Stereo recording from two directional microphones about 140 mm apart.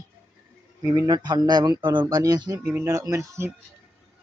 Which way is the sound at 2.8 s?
25° right (ahead or behind).